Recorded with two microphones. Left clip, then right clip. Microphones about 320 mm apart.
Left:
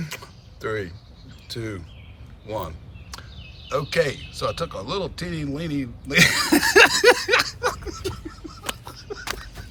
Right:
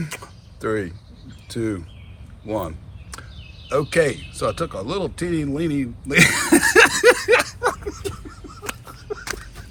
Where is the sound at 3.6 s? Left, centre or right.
Centre.